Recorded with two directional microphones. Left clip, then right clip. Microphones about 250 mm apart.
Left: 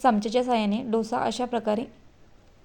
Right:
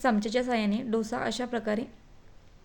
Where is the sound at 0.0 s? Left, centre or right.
Centre.